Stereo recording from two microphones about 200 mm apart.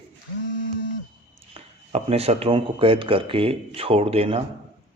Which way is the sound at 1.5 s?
30° right (ahead or behind).